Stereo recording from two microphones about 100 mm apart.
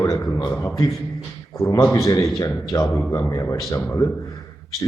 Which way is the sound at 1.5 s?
35° left (ahead or behind).